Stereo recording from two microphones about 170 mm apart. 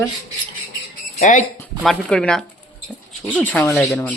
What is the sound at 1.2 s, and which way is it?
Speech, 50° left (ahead or behind).